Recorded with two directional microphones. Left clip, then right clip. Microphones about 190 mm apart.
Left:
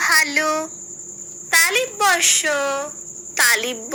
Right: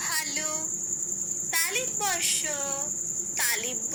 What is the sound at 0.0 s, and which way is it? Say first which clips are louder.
Cricket: left 14 dB; 45° left (ahead or behind).